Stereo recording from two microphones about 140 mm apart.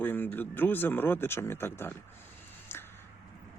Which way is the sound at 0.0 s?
15° left (ahead or behind).